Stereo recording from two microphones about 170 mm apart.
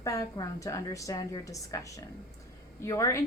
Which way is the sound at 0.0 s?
20° left (ahead or behind).